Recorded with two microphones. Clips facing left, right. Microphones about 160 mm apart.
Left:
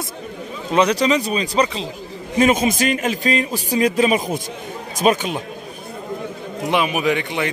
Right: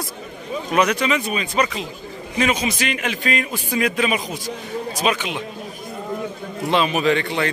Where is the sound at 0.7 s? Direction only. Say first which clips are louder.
Left 3 dB; 30° left (ahead or behind).